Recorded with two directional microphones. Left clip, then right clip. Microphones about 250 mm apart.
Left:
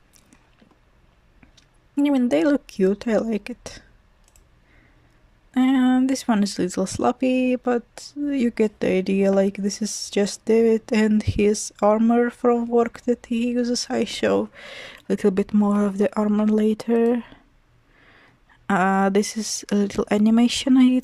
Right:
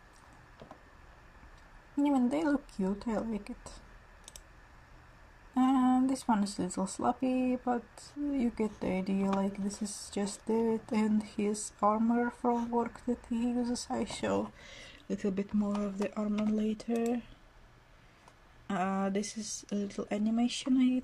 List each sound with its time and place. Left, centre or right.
2.0 s speech: left
5.5 s speech: left
18.7 s speech: left